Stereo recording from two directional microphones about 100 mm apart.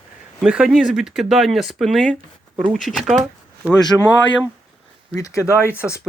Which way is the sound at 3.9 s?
10° left (ahead or behind).